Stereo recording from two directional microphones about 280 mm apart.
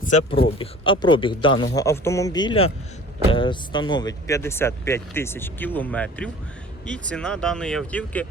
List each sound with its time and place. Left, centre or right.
0.0 s speech: left; by 8.3 s centre